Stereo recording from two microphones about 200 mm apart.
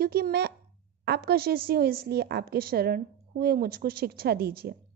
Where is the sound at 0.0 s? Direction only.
50° right (ahead or behind).